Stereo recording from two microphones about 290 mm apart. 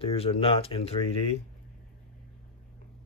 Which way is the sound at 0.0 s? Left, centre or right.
Centre.